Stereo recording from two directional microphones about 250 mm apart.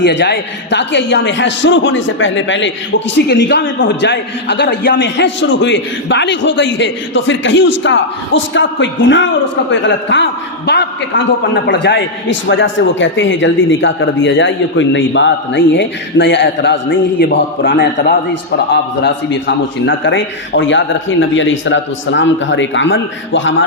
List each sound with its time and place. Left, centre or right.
0.0 s a man's voice: left